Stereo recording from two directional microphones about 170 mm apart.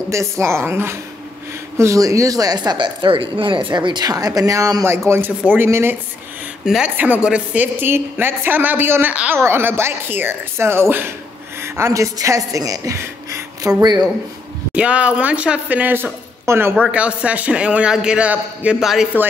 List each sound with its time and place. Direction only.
0.1 s a woman's voice: 15° right (ahead or behind)
14.8 s a woman's voice: 5° right (ahead or behind)